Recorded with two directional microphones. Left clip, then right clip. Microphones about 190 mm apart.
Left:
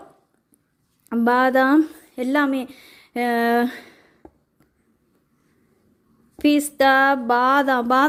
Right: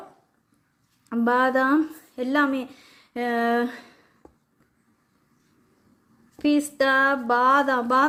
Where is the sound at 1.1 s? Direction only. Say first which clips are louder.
Left 4 dB; 40° left (ahead or behind).